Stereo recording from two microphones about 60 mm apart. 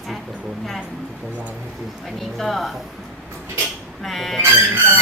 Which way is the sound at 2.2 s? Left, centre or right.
Centre.